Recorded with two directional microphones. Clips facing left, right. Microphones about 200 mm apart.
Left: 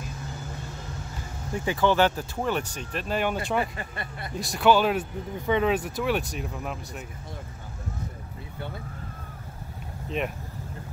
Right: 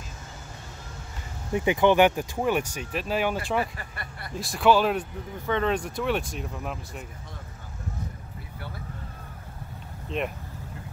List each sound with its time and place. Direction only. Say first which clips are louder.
1.5 s speech: right 3 dB; 20° right (ahead or behind)
3.7 s speech: left 4 dB; 20° left (ahead or behind)
4.4 s speech: even; centre (ahead or behind)
10.0 s speech: even; centre (ahead or behind)